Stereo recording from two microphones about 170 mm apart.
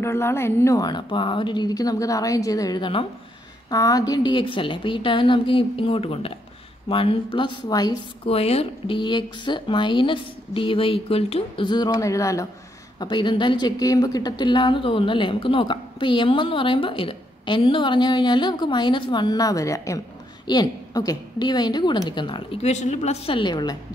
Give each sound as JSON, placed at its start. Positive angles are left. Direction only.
{"t": 0.0, "sound": "a woman's voice", "side_deg": 15}
{"t": 8.3, "sound": "a woman's voice", "side_deg": 35}